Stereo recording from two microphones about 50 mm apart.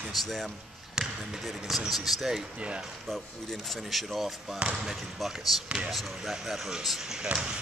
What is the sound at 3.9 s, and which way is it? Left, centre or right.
Speech, centre.